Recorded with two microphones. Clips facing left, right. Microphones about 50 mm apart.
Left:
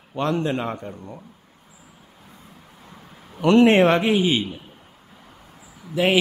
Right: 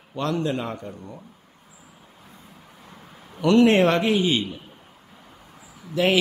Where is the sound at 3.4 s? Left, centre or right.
Left.